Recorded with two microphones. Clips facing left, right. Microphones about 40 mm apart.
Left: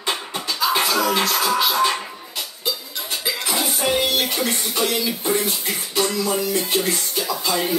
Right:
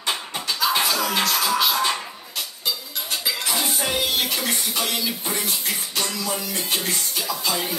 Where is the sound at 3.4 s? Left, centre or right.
Centre.